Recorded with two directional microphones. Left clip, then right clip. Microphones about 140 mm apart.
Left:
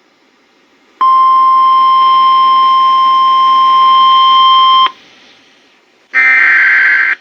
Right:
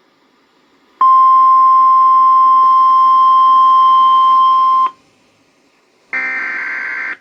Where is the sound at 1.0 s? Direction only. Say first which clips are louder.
Left 1 dB; 40° left (ahead or behind).